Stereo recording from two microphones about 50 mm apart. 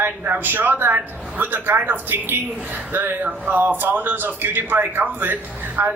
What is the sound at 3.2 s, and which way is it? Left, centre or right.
Speech, right.